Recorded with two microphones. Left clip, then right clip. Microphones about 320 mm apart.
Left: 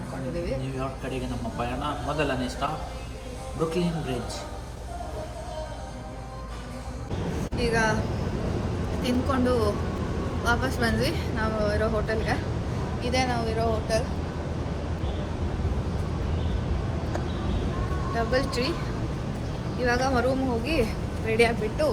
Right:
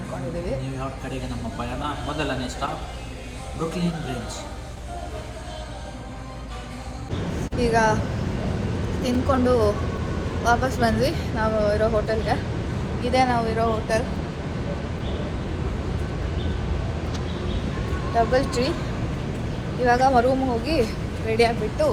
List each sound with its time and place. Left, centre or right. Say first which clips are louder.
1.5 s a man's voice: right 1 dB; centre
7.6 s speech: right 5 dB; centre
9.0 s speech: right 4 dB; centre
13.0 s a woman's voice: right 6 dB; centre
18.2 s speech: right 6 dB; centre
19.8 s speech: right 7 dB; centre